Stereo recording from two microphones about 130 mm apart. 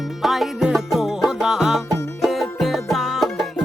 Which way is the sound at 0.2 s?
Centre (ahead or behind).